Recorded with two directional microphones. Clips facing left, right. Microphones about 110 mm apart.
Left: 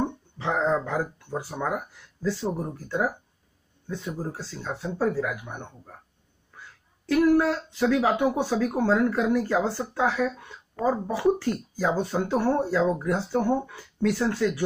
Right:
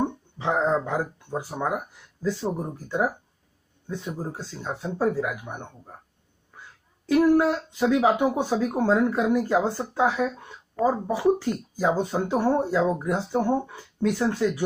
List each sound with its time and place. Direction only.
0.4 s speech: 20° right (ahead or behind)
7.3 s speech: 15° right (ahead or behind)